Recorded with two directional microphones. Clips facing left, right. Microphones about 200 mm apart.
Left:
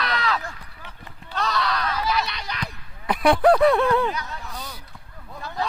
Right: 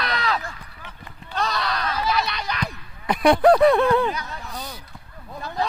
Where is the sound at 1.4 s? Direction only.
15° right (ahead or behind).